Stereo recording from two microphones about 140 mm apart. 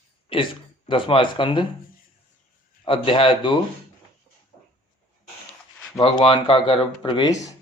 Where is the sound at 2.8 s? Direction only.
40° left (ahead or behind).